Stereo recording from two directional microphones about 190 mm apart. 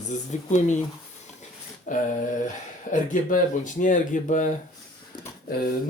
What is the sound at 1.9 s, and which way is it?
Speech, 40° left (ahead or behind).